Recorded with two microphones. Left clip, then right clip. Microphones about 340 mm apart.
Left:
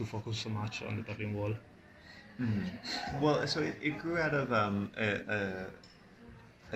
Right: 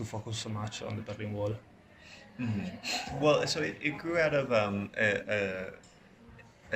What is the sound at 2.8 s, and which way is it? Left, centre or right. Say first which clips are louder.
Speech: right 3 dB; right.